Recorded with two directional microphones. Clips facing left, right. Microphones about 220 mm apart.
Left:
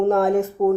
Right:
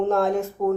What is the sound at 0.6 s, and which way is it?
Speech, 25° left (ahead or behind).